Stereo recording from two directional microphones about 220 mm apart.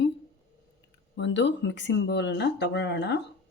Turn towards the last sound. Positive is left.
turn(degrees=50)  # may be behind; listen again after turning